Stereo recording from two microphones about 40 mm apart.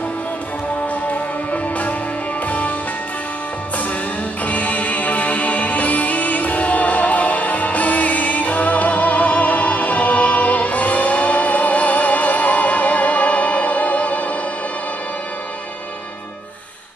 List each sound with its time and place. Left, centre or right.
1.0 s music: left
4.5 s music: left